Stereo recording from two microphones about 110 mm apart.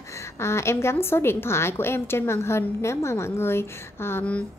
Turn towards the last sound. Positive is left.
turn(degrees=20)  # may be behind; listen again after turning